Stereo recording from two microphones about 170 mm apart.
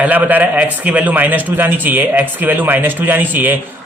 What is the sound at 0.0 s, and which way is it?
A man's voice, 10° right (ahead or behind).